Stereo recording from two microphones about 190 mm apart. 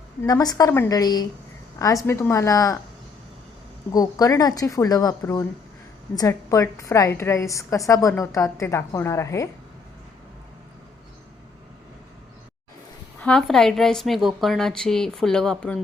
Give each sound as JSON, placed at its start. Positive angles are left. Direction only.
{"t": 0.3, "sound": "a woman's voice", "side_deg": 20}
{"t": 3.9, "sound": "a woman's voice", "side_deg": 20}
{"t": 13.2, "sound": "speech", "side_deg": 5}